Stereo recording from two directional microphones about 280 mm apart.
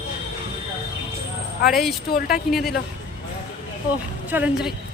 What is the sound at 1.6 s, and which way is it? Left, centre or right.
Speech, centre.